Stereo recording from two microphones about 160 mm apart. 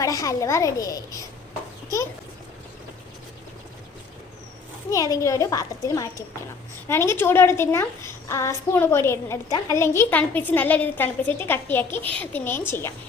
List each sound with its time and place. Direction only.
0.0 s a child's voice: 20° left (ahead or behind)
4.9 s a child's voice: 20° left (ahead or behind)